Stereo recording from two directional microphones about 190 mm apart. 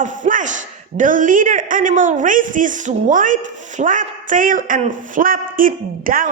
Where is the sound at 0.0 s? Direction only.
40° right (ahead or behind).